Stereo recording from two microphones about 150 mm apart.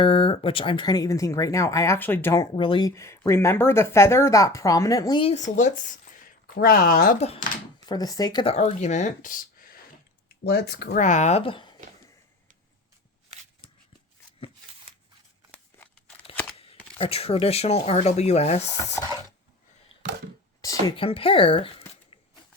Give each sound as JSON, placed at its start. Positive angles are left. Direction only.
{"t": 0.0, "sound": "speech", "side_deg": 35}
{"t": 2.6, "sound": "speech", "side_deg": 35}
{"t": 2.9, "sound": "speech", "side_deg": 20}
{"t": 5.2, "sound": "speech", "side_deg": 50}
{"t": 7.9, "sound": "speech", "side_deg": 25}
{"t": 8.5, "sound": "speech", "side_deg": 50}
{"t": 10.4, "sound": "speech", "side_deg": 90}
{"t": 11.0, "sound": "speech", "side_deg": 55}
{"t": 17.0, "sound": "speech", "side_deg": 40}
{"t": 20.6, "sound": "speech", "side_deg": 20}
{"t": 20.9, "sound": "speech", "side_deg": 35}